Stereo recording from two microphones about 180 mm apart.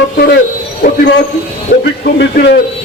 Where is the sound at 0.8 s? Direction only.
55° left (ahead or behind).